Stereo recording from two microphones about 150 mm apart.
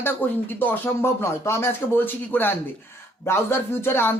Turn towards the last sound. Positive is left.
turn(degrees=15)  # may be behind; listen again after turning